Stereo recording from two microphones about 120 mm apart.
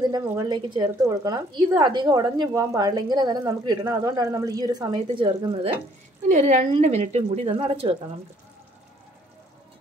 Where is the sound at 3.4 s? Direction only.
25° right (ahead or behind); by 5.7 s 45° right (ahead or behind).